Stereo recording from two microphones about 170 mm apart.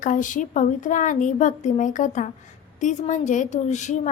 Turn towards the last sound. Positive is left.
turn(degrees=45)  # may be behind; listen again after turning